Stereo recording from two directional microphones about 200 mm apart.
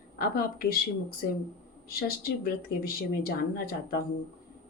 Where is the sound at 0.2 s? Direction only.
45° left (ahead or behind).